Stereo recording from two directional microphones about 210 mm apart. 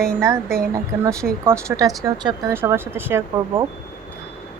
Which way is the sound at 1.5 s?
15° right (ahead or behind).